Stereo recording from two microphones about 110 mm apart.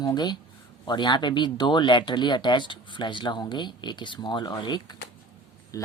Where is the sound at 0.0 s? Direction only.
40° left (ahead or behind).